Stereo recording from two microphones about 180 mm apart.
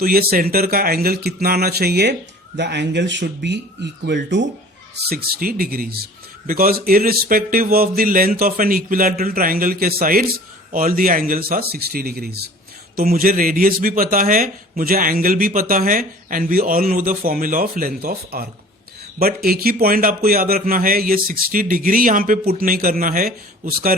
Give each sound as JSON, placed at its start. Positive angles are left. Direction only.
{"t": 0.0, "sound": "speech", "side_deg": -55}
{"t": 5.0, "sound": "speech", "side_deg": -55}